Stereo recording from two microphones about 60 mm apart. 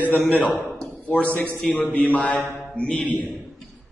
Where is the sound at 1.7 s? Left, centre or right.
Left.